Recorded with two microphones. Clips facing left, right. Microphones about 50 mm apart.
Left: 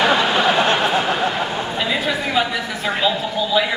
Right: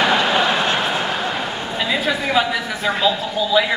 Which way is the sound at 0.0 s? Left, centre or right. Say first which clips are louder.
Even; centre.